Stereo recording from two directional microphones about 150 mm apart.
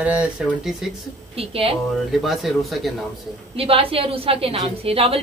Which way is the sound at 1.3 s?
40° right (ahead or behind).